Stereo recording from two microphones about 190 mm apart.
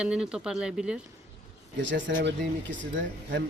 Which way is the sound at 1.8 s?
70° right (ahead or behind).